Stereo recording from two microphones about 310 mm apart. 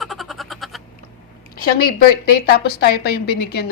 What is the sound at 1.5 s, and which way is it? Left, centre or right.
A woman's voice, left.